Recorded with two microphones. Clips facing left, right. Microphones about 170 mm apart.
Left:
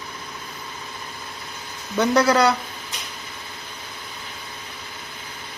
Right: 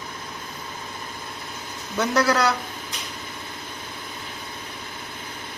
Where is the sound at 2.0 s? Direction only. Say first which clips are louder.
Left 4 dB; centre (ahead or behind).